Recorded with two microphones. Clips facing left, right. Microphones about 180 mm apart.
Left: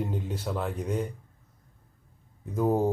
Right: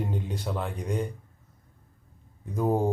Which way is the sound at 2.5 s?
5° left (ahead or behind).